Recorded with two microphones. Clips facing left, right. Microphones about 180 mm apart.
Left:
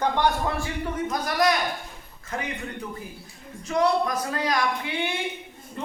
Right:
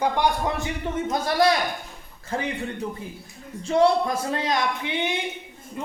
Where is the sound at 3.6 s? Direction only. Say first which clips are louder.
Right 3 dB; 30° right (ahead or behind).